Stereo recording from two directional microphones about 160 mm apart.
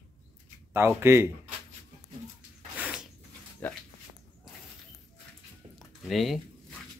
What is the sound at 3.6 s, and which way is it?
Speech, 10° left (ahead or behind).